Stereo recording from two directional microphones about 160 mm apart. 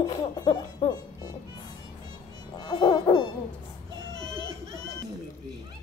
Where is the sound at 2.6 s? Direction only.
25° left (ahead or behind).